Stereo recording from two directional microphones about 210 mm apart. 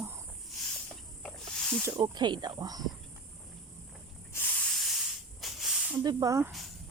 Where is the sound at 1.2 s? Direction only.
5° left (ahead or behind).